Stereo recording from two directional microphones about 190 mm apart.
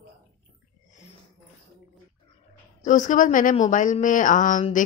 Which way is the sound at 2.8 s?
40° left (ahead or behind).